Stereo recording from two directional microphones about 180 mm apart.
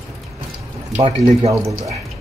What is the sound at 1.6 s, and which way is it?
Speech, 15° right (ahead or behind).